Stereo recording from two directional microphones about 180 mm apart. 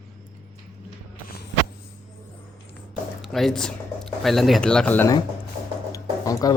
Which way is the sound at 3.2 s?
Centre (ahead or behind).